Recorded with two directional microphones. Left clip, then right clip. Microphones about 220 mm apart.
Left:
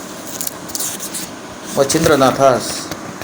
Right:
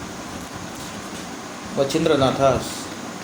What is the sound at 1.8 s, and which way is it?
Speech, 30° left (ahead or behind).